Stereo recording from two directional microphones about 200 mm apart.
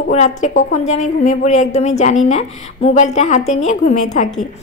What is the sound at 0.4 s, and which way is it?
A woman's voice, 35° left (ahead or behind).